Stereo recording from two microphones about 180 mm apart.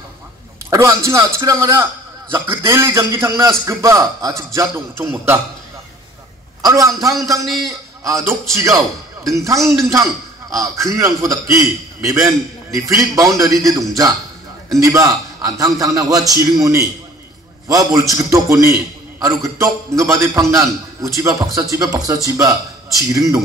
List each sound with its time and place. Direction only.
0.7 s a man's voice: 15° right (ahead or behind)
6.6 s a man's voice: 20° right (ahead or behind)